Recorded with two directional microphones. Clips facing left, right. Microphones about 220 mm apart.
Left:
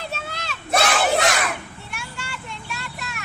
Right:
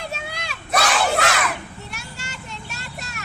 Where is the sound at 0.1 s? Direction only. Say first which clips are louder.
Even; 10° right (ahead or behind).